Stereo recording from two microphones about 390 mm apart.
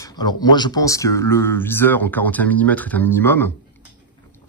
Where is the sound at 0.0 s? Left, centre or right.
Centre.